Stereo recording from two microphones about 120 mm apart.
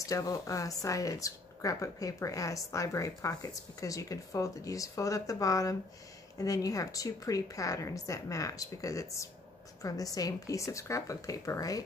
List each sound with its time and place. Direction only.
0.0 s speech: 30° left (ahead or behind)